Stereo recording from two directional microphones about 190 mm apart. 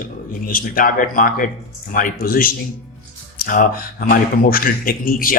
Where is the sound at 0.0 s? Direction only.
50° left (ahead or behind).